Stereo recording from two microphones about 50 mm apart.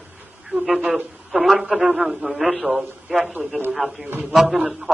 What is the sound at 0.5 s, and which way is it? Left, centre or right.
A man's voice, centre.